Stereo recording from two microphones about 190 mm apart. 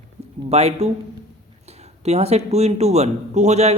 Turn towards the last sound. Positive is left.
turn(degrees=-35)  # may be behind; listen again after turning